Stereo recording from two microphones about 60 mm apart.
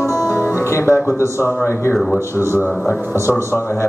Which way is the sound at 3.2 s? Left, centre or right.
Left.